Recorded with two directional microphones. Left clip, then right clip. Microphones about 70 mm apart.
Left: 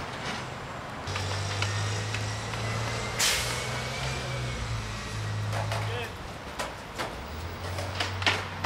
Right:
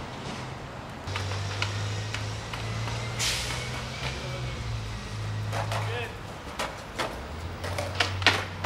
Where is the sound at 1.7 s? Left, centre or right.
Left.